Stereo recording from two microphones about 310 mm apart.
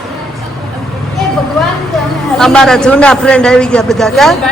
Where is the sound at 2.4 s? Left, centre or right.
Centre.